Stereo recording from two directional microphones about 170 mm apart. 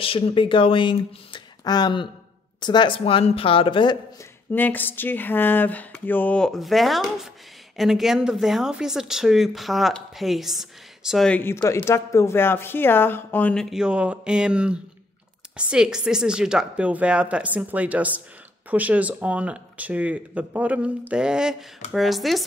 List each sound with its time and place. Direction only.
0.0 s a woman's voice: 30° left (ahead or behind)
4.5 s speech: 10° left (ahead or behind)